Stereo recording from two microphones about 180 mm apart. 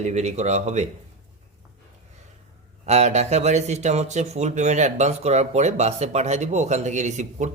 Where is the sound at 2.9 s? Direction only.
40° right (ahead or behind).